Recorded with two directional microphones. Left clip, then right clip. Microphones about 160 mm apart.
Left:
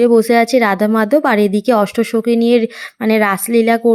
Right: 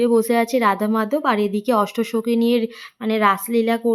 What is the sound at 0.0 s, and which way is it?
Speech, 25° left (ahead or behind).